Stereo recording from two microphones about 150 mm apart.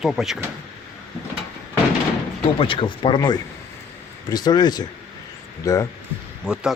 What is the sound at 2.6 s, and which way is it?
Speech, 35° left (ahead or behind).